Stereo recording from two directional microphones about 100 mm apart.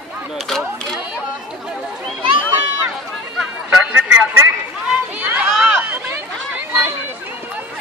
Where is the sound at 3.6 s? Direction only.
15° right (ahead or behind).